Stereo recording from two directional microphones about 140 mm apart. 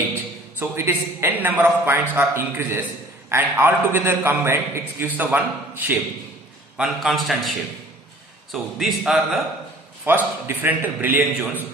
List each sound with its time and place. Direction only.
0.9 s a man's voice: 15° right (ahead or behind)
6.7 s speech: centre (ahead or behind)
8.5 s speech: centre (ahead or behind)
10.1 s a man's voice: 15° right (ahead or behind)